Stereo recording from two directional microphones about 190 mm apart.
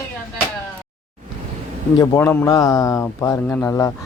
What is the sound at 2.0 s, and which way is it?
Speech, 20° left (ahead or behind).